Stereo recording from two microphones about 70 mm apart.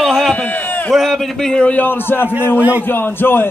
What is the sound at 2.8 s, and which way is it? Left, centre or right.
Speech, left.